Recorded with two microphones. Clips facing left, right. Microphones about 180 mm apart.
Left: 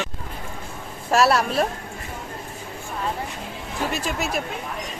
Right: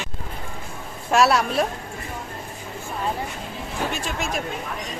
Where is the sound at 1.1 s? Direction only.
Centre (ahead or behind).